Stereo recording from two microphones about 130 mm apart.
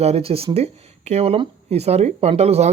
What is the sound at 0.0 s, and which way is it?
Speech, 50° right (ahead or behind).